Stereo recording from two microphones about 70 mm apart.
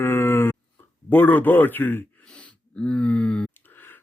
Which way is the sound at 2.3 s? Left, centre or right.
Centre.